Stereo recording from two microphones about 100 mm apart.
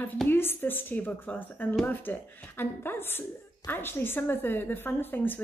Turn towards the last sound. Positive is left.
turn(degrees=20)  # may be behind; listen again after turning